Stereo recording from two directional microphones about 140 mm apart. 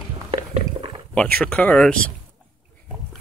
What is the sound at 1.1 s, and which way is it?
Speech, 5° left (ahead or behind).